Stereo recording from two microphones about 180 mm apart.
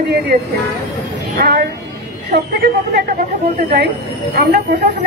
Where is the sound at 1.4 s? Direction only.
65° right (ahead or behind).